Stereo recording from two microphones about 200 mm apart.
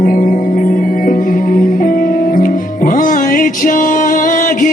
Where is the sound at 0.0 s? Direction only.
45° left (ahead or behind).